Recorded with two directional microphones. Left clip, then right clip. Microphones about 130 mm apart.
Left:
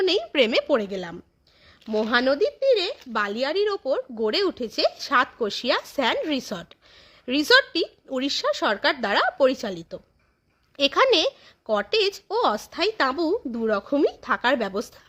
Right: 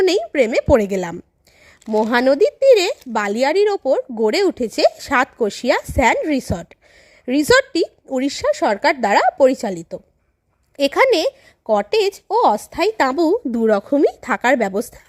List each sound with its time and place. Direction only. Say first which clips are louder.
0.0 s a woman's voice: right 6 dB; 60° right (ahead or behind)
0.3 s a woman's voice: right 2 dB; 40° right (ahead or behind)
0.7 s speech: right 9 dB; 75° right (ahead or behind)
2.0 s speech: right 6 dB; 65° right (ahead or behind); by 2.9 s 90° right
3.1 s speech: right 6 dB; 60° right (ahead or behind)